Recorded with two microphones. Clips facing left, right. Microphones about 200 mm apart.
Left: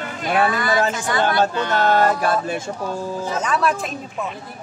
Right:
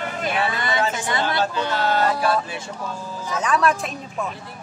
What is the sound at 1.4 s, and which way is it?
Speech, 50° left (ahead or behind).